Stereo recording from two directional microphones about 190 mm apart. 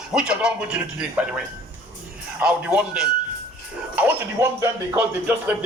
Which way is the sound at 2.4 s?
5° right (ahead or behind).